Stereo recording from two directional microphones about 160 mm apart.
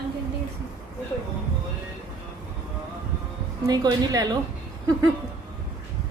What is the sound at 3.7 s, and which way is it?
Speech, 25° right (ahead or behind).